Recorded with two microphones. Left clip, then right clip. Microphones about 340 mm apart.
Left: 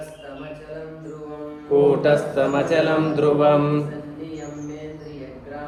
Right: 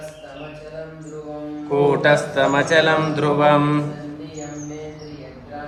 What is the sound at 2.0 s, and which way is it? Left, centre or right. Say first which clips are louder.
Speech: right 2 dB; centre.